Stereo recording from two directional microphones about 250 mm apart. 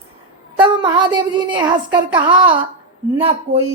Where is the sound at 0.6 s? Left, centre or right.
Centre.